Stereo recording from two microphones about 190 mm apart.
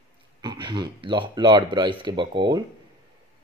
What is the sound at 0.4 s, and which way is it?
Speech, 25° right (ahead or behind).